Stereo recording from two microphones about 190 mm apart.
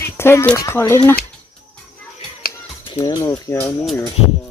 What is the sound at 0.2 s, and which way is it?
Speech, 15° left (ahead or behind).